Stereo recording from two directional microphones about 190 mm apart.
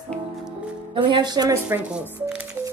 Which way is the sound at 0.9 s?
25° right (ahead or behind).